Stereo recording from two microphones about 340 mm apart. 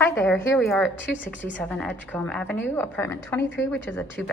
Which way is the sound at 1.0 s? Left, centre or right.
Left.